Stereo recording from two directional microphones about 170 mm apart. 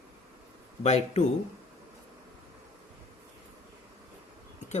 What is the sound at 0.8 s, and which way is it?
Speech, 40° left (ahead or behind).